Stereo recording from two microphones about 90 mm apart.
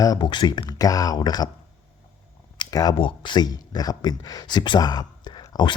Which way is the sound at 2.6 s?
45° left (ahead or behind).